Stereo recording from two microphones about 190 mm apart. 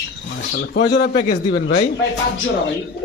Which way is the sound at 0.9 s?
65° left (ahead or behind).